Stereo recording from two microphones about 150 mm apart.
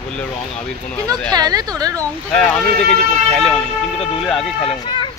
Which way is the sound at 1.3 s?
25° right (ahead or behind).